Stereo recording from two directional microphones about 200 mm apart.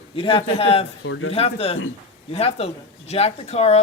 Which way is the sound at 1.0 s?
70° left (ahead or behind).